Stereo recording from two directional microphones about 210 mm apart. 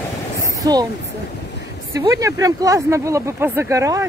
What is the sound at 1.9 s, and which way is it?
Speech, 15° right (ahead or behind).